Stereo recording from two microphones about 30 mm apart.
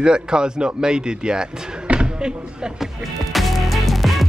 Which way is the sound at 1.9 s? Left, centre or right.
Right.